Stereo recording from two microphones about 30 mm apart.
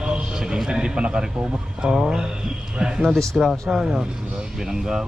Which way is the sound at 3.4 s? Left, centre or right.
Centre.